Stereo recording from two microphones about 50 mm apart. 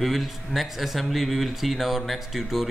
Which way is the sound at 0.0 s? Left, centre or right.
Centre.